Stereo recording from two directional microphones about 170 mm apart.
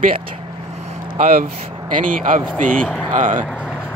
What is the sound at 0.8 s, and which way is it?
Vehicle, 55° right (ahead or behind).